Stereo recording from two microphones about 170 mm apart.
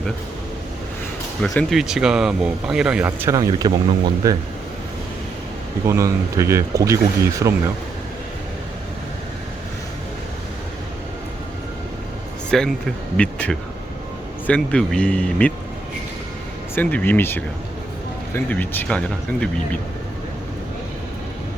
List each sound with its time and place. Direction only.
1.5 s speech: centre (ahead or behind); by 4.4 s 25° right (ahead or behind)
5.8 s speech: 20° right (ahead or behind)
12.5 s speech: 5° left (ahead or behind)
16.7 s speech: 10° left (ahead or behind)